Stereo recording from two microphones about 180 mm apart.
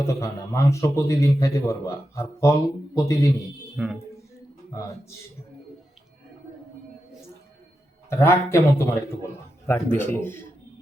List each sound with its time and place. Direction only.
0.0 s a man's voice: 15° left (ahead or behind)
3.8 s speech: 5° right (ahead or behind)
4.7 s a man's voice: 15° left (ahead or behind)
8.1 s a man's voice: 15° left (ahead or behind)